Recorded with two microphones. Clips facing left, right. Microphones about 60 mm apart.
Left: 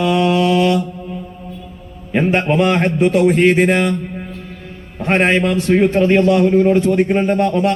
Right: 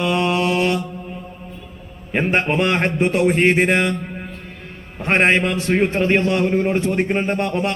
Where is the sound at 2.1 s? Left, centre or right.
Centre.